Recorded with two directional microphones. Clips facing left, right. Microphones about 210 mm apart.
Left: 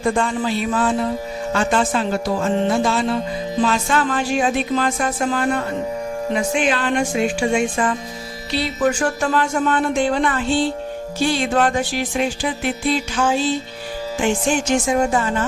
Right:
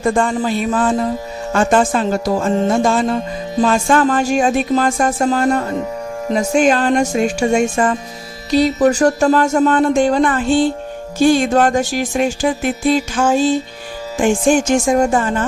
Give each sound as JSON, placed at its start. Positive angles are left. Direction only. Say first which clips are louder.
{"t": 0.0, "sound": "music", "louder": "right 4 dB", "side_deg": -45}